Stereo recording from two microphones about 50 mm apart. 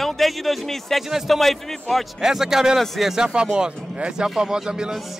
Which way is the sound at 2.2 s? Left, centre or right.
Centre.